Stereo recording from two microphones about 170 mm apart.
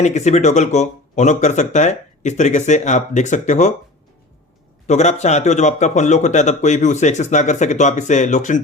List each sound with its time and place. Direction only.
0.0 s speech: 40° left (ahead or behind)
4.9 s speech: 40° left (ahead or behind)